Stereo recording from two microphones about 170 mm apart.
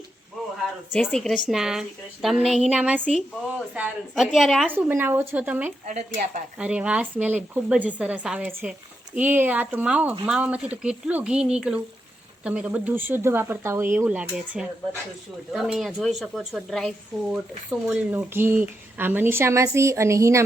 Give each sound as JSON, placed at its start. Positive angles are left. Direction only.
{"t": 0.9, "sound": "speech", "side_deg": 0}
{"t": 4.7, "sound": "speech", "side_deg": -10}
{"t": 5.8, "sound": "speech", "side_deg": -45}
{"t": 6.6, "sound": "speech", "side_deg": -5}